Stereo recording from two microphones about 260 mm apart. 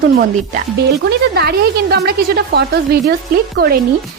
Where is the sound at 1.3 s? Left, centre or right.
Right.